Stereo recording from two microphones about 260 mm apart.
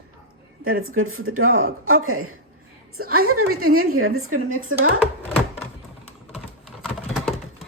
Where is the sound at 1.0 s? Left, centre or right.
Right.